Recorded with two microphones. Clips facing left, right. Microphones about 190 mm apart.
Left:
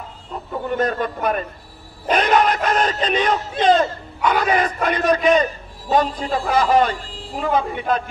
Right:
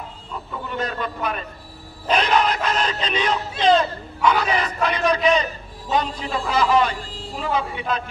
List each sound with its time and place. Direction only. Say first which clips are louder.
0.7 s a man's voice: left 6 dB; 45° left (ahead or behind)